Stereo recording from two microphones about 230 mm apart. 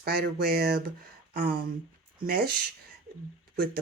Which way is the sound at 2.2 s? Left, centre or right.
Right.